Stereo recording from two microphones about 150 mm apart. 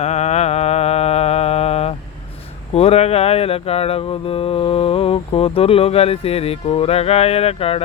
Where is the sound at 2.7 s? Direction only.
45° left (ahead or behind).